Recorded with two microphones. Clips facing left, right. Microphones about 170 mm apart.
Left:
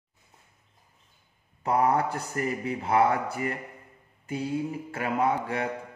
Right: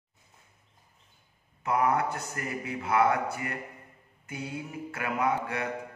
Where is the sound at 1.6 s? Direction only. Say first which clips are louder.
Left 2 dB; 35° left (ahead or behind).